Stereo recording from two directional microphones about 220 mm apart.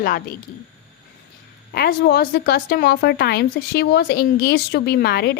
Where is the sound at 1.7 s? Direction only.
45° left (ahead or behind).